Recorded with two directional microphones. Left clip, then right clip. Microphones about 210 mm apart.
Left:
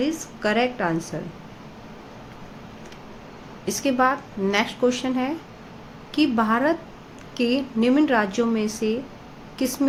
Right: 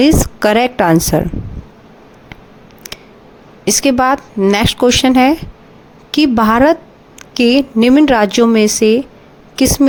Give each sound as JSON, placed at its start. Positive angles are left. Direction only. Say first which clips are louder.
{"t": 0.0, "sound": "a woman's voice", "louder": "right 14 dB", "side_deg": -55}
{"t": 3.7, "sound": "speech", "louder": "right 9 dB", "side_deg": -45}